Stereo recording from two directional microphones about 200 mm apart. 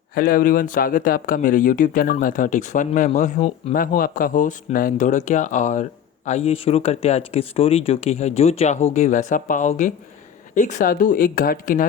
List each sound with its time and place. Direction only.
0.1 s speech: 45° left (ahead or behind)